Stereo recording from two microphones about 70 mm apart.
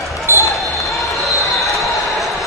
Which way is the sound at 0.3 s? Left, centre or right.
Right.